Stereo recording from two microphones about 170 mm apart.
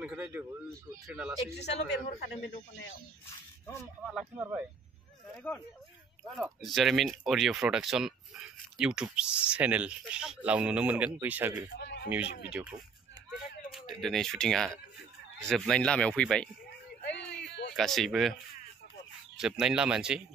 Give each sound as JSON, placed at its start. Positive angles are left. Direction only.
{"t": 0.0, "sound": "speech", "side_deg": -10}
{"t": 1.5, "sound": "a man's voice", "side_deg": 80}
{"t": 4.0, "sound": "speech", "side_deg": 0}
{"t": 4.4, "sound": "speech", "side_deg": -15}
{"t": 5.3, "sound": "speech", "side_deg": 10}
{"t": 11.7, "sound": "a man's voice", "side_deg": 90}
{"t": 12.4, "sound": "speech", "side_deg": -5}
{"t": 17.1, "sound": "a sound", "side_deg": 90}
{"t": 17.7, "sound": "speech", "side_deg": 0}
{"t": 19.3, "sound": "speech", "side_deg": -5}